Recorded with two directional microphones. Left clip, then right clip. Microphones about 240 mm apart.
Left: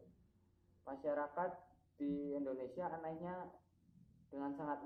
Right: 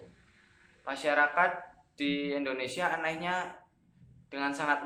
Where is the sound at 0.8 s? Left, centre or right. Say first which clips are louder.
Right 14 dB; right.